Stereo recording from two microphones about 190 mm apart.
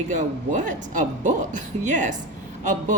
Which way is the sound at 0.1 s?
40° right (ahead or behind).